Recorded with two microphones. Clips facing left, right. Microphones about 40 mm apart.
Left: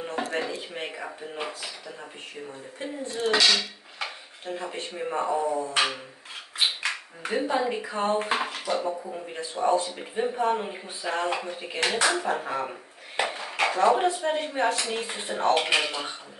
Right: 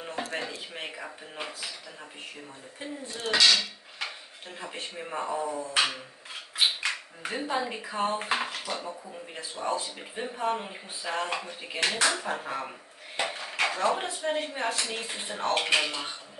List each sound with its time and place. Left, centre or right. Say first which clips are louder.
0.3 s speech: left 5 dB; centre
3.3 s speech: right 1 dB; centre
8.7 s speech: left 8 dB; left
9.3 s speech: left 7 dB; centre
13.1 s dishes: left 3 dB; centre
14.0 s speech: left 5 dB; centre